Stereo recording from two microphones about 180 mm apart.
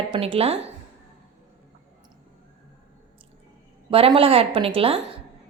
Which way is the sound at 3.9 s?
30° right (ahead or behind).